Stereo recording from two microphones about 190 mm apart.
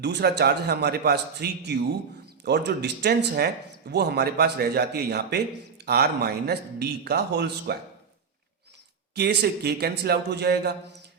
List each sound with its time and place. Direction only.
0.0 s speech: 60° right (ahead or behind)
9.1 s speech: 60° right (ahead or behind)